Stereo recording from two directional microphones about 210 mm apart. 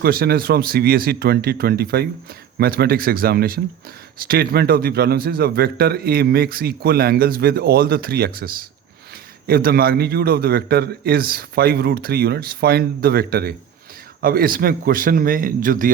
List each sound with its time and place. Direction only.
0.0 s a man's voice: 45° right (ahead or behind)
9.5 s a man's voice: 45° right (ahead or behind)